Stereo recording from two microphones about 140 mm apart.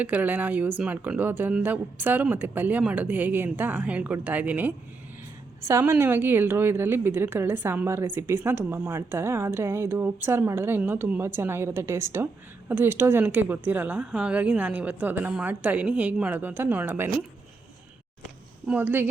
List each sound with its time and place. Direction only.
0.0 s a woman's voice: 10° right (ahead or behind)
18.7 s a woman's voice: 15° right (ahead or behind)